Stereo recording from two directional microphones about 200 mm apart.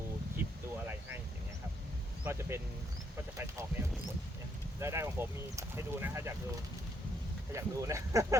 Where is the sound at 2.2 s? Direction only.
15° right (ahead or behind).